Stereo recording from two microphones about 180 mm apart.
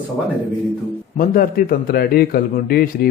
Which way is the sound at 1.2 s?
55° left (ahead or behind).